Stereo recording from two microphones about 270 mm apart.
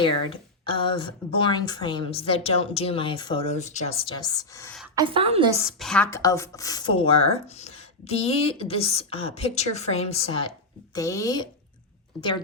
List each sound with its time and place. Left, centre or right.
0.6 s a woman's voice: centre
4.9 s a woman's voice: centre
5.5 s a woman's voice: centre; by 10.4 s left
10.9 s speech: centre